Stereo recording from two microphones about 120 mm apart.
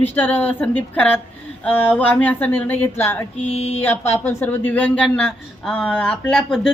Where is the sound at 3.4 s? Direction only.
60° left (ahead or behind).